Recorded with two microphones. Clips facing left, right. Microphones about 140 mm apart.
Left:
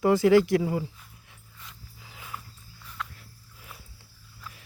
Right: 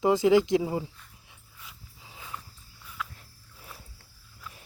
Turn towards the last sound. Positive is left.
turn(degrees=-5)  # may be behind; listen again after turning